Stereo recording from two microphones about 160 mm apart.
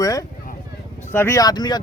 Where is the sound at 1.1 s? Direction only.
15° left (ahead or behind).